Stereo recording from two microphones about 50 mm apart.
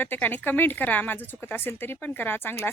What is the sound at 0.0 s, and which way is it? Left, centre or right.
Speech, left.